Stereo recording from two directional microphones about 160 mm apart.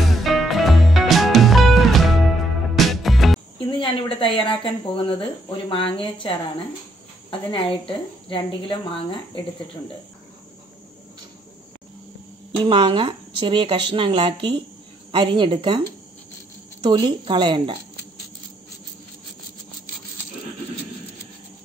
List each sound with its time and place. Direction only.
0.0 s music: centre (ahead or behind)
3.5 s speech: 35° left (ahead or behind)
7.2 s speech: 35° left (ahead or behind)
12.6 s speech: 30° right (ahead or behind)